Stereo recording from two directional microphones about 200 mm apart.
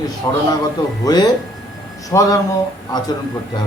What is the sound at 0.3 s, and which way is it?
A man's voice, 15° left (ahead or behind).